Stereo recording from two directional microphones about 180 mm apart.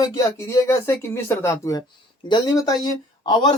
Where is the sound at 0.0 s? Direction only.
15° left (ahead or behind).